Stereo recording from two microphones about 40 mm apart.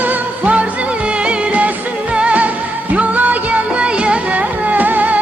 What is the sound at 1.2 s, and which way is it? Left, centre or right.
Music, right.